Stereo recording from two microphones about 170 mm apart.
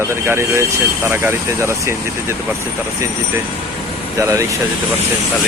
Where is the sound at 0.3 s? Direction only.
15° right (ahead or behind).